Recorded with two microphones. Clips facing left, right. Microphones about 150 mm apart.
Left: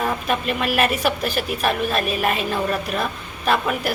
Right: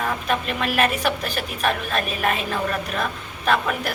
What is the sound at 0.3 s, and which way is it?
A woman's voice, 5° left (ahead or behind).